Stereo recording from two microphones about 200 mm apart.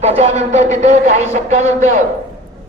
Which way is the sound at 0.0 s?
35° right (ahead or behind).